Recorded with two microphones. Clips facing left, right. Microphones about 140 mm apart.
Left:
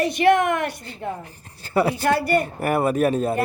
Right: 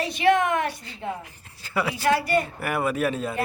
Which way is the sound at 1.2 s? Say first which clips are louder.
Left 4 dB; 35° left (ahead or behind).